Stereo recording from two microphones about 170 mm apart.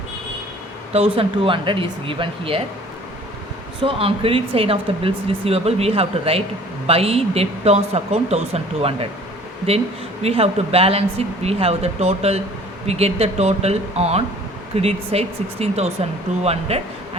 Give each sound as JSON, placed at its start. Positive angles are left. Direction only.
{"t": 0.9, "sound": "speech", "side_deg": -35}
{"t": 3.8, "sound": "speech", "side_deg": -30}
{"t": 10.2, "sound": "speech", "side_deg": -35}